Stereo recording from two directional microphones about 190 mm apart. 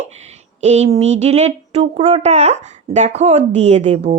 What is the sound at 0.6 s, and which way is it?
Speech, 35° right (ahead or behind).